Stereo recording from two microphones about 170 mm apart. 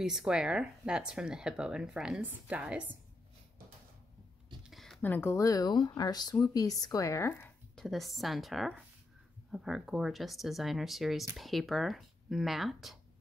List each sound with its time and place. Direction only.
0.0 s speech: 5° right (ahead or behind)
4.6 s speech: centre (ahead or behind)
7.8 s speech: centre (ahead or behind)